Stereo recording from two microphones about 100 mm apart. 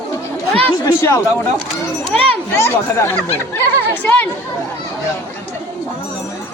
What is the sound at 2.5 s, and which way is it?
Speech, 25° left (ahead or behind).